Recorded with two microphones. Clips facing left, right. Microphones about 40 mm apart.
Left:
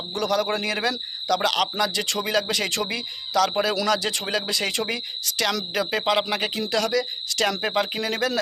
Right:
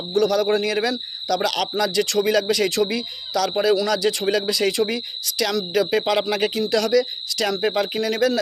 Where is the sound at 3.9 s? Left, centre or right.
Left.